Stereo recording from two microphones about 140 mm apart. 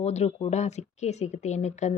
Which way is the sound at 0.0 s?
50° left (ahead or behind).